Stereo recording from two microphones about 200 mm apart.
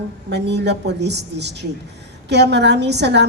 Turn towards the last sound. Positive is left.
turn(degrees=-60)  # may be behind; listen again after turning